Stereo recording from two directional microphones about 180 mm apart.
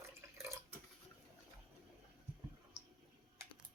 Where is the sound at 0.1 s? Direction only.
15° right (ahead or behind).